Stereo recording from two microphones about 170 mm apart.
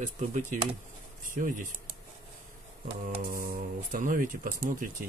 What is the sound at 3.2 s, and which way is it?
Speech, 60° right (ahead or behind).